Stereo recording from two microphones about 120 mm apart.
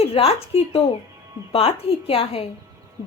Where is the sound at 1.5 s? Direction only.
55° left (ahead or behind).